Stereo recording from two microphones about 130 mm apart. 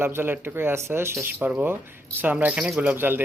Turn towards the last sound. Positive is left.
turn(degrees=-15)  # may be behind; listen again after turning